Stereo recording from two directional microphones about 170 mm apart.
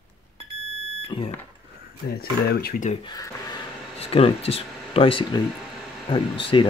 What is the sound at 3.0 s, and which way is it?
Speech, 20° left (ahead or behind).